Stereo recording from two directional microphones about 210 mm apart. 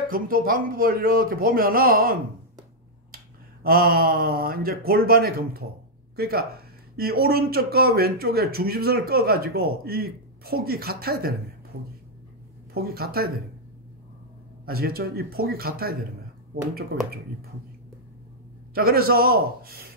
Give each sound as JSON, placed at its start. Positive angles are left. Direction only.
{"t": 0.1, "sound": "speech", "side_deg": -45}
{"t": 3.6, "sound": "speech", "side_deg": -45}
{"t": 12.7, "sound": "speech", "side_deg": -45}
{"t": 14.7, "sound": "speech", "side_deg": -45}
{"t": 18.8, "sound": "speech", "side_deg": -45}